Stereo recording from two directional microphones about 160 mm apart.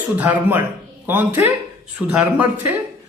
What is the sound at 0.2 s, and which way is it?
Speech, 10° right (ahead or behind).